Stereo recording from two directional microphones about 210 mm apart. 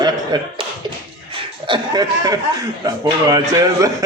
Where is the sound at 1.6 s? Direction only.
20° right (ahead or behind).